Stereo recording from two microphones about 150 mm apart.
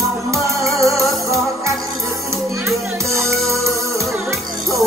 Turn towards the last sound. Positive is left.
turn(degrees=-20)  # may be behind; listen again after turning